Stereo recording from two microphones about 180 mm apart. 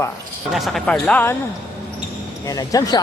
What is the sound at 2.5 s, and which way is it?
Speech, 20° left (ahead or behind).